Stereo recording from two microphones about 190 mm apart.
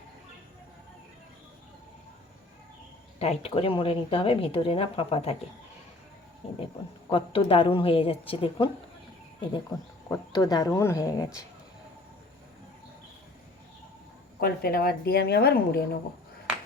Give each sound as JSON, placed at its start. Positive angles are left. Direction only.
{"t": 3.2, "sound": "speech", "side_deg": 30}
{"t": 6.4, "sound": "a woman's voice", "side_deg": 35}
{"t": 10.1, "sound": "speech", "side_deg": 20}
{"t": 14.3, "sound": "a woman's voice", "side_deg": 55}